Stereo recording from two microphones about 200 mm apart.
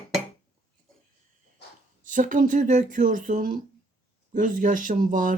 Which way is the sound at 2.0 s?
40° right (ahead or behind).